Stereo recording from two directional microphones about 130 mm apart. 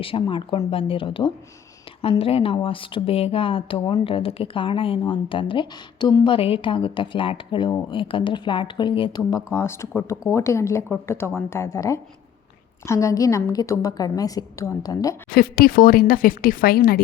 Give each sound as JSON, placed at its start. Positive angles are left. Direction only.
{"t": 0.0, "sound": "speech", "side_deg": 45}
{"t": 9.3, "sound": "a woman's voice", "side_deg": 20}
{"t": 15.8, "sound": "a woman's voice", "side_deg": 90}